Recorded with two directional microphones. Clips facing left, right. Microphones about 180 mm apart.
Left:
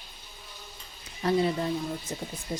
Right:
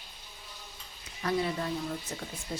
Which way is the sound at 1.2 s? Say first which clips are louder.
Left 5 dB; 25° left (ahead or behind).